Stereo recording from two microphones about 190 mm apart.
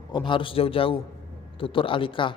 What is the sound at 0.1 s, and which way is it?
A man's voice, 25° left (ahead or behind).